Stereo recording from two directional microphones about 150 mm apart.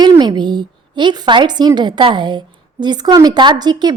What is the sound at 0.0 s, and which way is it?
A woman's voice, 30° right (ahead or behind).